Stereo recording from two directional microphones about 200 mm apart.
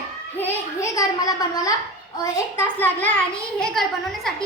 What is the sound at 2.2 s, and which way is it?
A child's voice, 15° left (ahead or behind).